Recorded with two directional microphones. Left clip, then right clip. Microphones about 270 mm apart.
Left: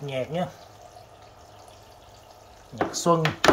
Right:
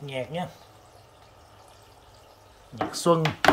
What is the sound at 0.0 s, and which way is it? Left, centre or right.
Speech, centre.